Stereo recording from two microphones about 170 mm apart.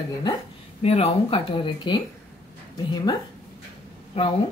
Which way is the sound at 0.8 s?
35° left (ahead or behind).